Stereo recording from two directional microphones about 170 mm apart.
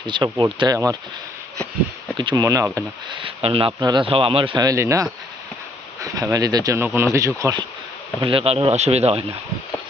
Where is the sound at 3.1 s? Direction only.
35° right (ahead or behind).